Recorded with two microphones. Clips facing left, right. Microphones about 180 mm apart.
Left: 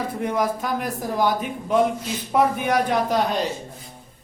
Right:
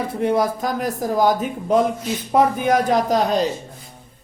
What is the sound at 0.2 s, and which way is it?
Speech, 30° right (ahead or behind).